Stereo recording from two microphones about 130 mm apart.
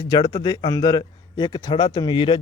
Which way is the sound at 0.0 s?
30° left (ahead or behind).